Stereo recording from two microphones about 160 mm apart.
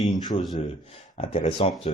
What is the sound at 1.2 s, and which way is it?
Speech, 40° left (ahead or behind).